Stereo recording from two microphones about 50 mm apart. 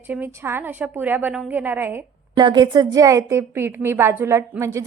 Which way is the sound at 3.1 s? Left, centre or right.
Right.